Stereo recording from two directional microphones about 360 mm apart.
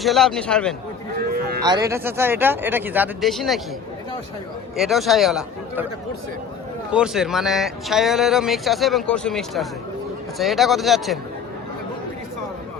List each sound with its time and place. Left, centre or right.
0.0 s speech: centre
1.3 s cattle: right
1.6 s speech: centre
4.8 s speech: centre
6.9 s speech: centre